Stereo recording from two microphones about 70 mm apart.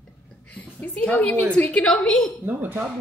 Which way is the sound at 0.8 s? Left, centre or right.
Left.